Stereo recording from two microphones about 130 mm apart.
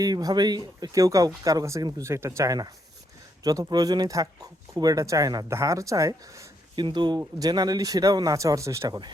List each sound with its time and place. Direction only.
0.0 s speech: 30° right (ahead or behind)
6.7 s speech: 35° right (ahead or behind)